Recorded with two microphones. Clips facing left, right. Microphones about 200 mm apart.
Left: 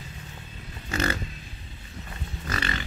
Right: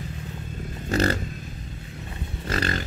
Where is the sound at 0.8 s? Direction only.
35° right (ahead or behind).